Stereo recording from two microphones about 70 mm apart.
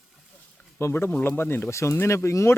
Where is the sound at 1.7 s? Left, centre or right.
Left.